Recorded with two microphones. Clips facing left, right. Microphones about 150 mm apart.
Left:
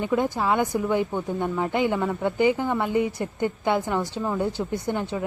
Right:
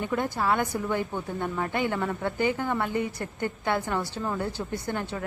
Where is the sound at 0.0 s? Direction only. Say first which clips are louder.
Left 4 dB; 15° left (ahead or behind).